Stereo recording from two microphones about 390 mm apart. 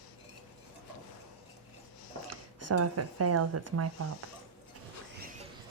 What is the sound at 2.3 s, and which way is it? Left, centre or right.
Speech, right.